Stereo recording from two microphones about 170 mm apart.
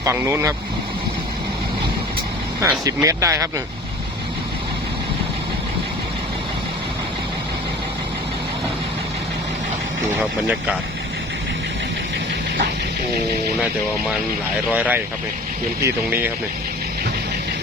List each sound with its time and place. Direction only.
0.0 s speech: 15° right (ahead or behind)
2.6 s speech: 15° right (ahead or behind)
14.7 s speech: 10° right (ahead or behind)